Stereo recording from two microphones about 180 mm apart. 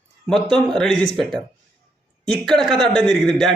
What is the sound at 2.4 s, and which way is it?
Speech, centre (ahead or behind).